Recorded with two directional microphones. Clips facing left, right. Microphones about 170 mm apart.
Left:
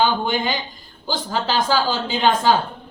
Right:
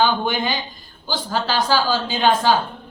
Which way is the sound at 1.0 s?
20° left (ahead or behind).